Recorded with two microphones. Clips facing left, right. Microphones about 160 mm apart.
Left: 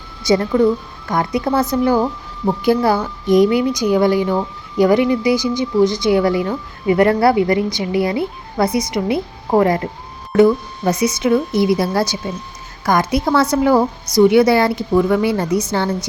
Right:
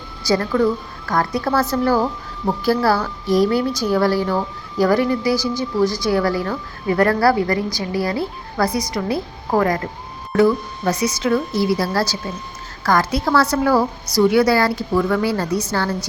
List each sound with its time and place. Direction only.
0.2 s a woman's voice: 20° left (ahead or behind)